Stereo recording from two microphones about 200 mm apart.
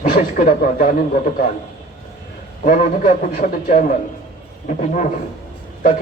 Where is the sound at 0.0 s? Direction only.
40° left (ahead or behind).